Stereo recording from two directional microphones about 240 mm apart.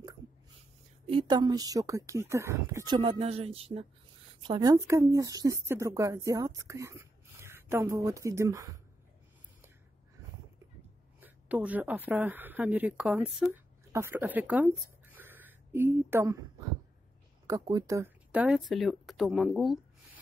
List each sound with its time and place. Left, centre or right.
1.1 s speech: centre
11.1 s speech: centre
17.5 s speech: centre